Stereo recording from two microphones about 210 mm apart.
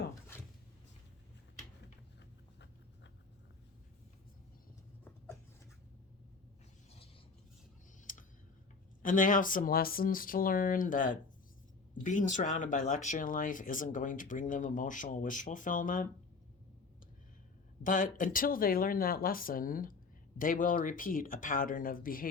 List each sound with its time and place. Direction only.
8.1 s tick: 40° left (ahead or behind)
9.0 s speech: 40° left (ahead or behind)
17.8 s speech: 40° left (ahead or behind)